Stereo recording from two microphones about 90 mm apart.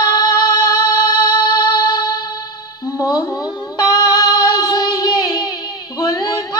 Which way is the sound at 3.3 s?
45° left (ahead or behind).